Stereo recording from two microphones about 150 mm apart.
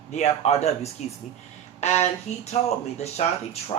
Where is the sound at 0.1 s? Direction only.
45° left (ahead or behind).